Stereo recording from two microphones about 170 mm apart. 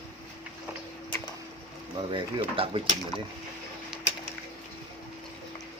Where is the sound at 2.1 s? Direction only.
35° right (ahead or behind).